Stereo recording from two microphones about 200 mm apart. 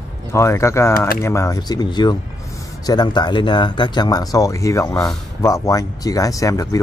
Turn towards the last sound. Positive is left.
turn(degrees=15)  # may be behind; listen again after turning